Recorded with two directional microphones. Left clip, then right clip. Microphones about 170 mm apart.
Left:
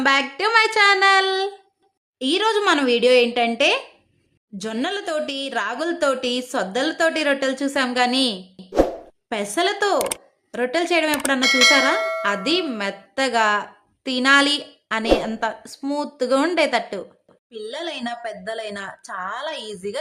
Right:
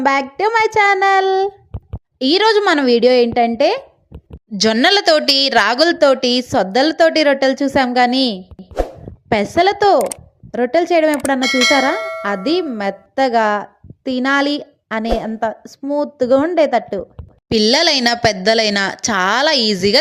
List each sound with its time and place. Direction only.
0.0 s a woman's voice: 20° right (ahead or behind)
8.5 s plop: centre (ahead or behind)
9.3 s a woman's voice: 25° right (ahead or behind)
11.3 s speech: centre (ahead or behind)
12.2 s a woman's voice: 20° right (ahead or behind)
17.6 s a woman's voice: 30° right (ahead or behind)